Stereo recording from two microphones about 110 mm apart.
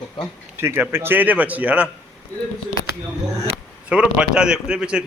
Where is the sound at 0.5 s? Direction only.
20° right (ahead or behind).